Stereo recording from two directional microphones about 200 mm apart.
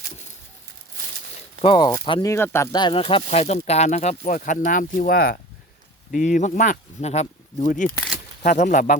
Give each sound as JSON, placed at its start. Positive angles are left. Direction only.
{"t": 1.6, "sound": "speech", "side_deg": 25}
{"t": 7.9, "sound": "speech", "side_deg": 10}
{"t": 8.4, "sound": "speech", "side_deg": 40}